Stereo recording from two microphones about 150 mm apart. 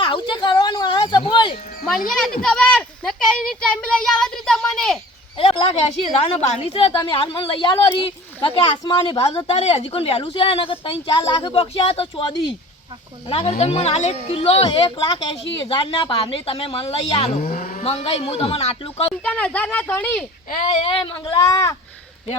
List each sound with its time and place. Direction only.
0.0 s a sound: 30° left (ahead or behind)
2.0 s speech: 5° left (ahead or behind)
5.4 s a woman's voice: 35° left (ahead or behind)
17.4 s vehicle: 75° left (ahead or behind)
17.8 s a woman's voice: 40° left (ahead or behind)
19.2 s speech: 10° left (ahead or behind)
20.5 s a woman's voice: 50° left (ahead or behind); by 21.8 s 25° left (ahead or behind)